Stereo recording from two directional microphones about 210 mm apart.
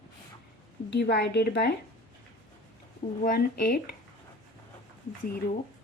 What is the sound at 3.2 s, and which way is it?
Speech, 45° left (ahead or behind).